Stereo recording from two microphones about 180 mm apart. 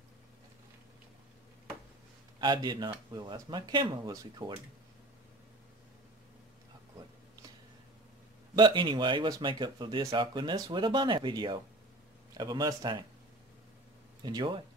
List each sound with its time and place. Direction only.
2.4 s speech: 25° right (ahead or behind)
8.5 s speech: 25° right (ahead or behind)
14.2 s speech: 25° right (ahead or behind)